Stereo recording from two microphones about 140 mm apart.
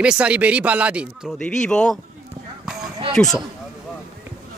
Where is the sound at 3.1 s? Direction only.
5° left (ahead or behind).